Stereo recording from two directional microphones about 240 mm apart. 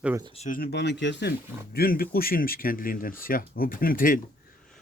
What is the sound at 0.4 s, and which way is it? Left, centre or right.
Speech, left.